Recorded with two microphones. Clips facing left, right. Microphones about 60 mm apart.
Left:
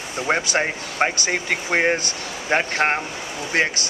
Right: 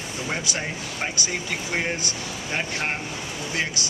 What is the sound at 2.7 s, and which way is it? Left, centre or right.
Speech, left.